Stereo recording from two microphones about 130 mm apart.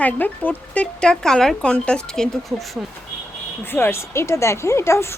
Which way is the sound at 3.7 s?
15° left (ahead or behind).